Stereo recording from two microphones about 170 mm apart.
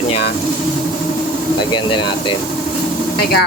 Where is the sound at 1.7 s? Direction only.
30° left (ahead or behind).